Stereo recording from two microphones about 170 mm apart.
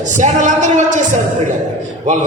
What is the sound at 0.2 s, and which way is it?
A man's voice, 45° right (ahead or behind).